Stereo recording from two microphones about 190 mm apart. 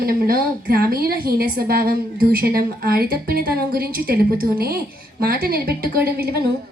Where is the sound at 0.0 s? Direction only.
50° right (ahead or behind).